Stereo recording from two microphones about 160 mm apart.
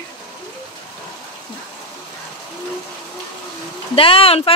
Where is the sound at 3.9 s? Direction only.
35° left (ahead or behind).